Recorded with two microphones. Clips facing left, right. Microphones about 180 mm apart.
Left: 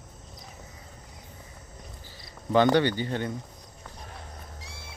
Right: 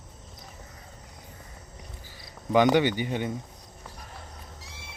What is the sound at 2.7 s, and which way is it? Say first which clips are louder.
Speech: even; 15° right (ahead or behind).